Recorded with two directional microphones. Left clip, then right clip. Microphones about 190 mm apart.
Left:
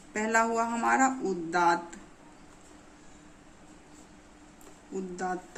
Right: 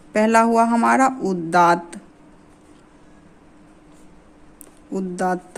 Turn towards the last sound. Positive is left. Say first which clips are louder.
# right 11 dB
turn(degrees=-55)  # may be behind; listen again after turning